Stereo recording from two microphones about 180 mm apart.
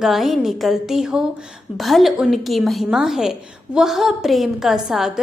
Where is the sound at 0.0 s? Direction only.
Centre (ahead or behind).